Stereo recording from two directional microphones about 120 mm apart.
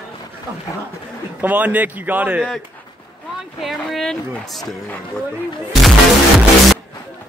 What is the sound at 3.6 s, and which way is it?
Speech, centre (ahead or behind).